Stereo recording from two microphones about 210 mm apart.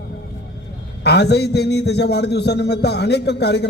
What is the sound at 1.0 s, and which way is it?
A man's voice, 50° left (ahead or behind).